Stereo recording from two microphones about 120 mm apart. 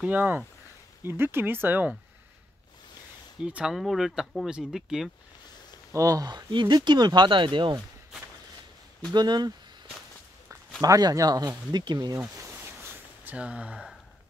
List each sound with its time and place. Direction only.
0.0 s speech: 15° right (ahead or behind)
3.3 s speech: 10° right (ahead or behind)
5.9 s speech: 30° right (ahead or behind)
9.1 s speech: 35° right (ahead or behind)
10.8 s speech: 30° right (ahead or behind)
12.2 s a sound: 20° right (ahead or behind)